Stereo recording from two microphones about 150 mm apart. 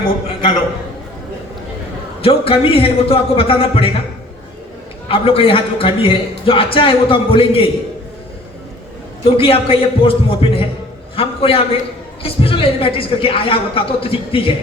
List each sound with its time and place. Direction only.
2.2 s a man's voice: 40° left (ahead or behind)
5.0 s a man's voice: 40° left (ahead or behind)
9.2 s a man's voice: 40° left (ahead or behind)